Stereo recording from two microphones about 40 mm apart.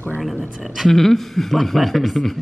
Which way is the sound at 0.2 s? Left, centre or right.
Centre.